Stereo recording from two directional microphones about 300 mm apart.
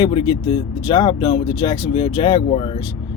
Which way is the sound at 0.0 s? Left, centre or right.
Centre.